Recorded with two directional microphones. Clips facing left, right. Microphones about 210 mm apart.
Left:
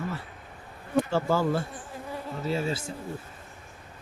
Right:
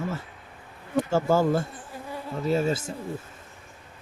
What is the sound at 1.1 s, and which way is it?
Speech, 45° right (ahead or behind).